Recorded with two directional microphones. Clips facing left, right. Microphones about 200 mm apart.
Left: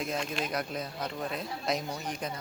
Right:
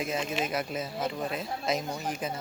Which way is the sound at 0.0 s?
5° right (ahead or behind).